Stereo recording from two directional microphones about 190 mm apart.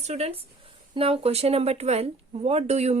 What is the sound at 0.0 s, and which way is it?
Speech, 35° right (ahead or behind).